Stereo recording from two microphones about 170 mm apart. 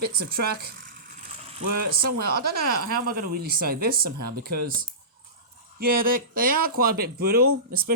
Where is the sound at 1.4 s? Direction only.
35° right (ahead or behind).